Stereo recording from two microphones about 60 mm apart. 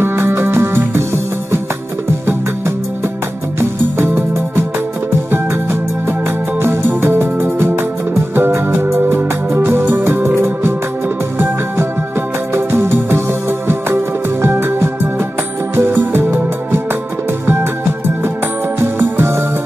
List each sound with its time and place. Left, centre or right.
0.0 s music: right
3.5 s music: right
12.5 s music: right
18.8 s music: right